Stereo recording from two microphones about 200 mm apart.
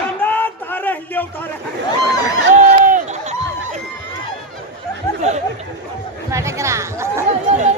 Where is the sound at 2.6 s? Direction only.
40° right (ahead or behind).